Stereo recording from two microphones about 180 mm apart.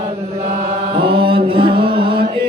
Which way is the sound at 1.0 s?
30° right (ahead or behind).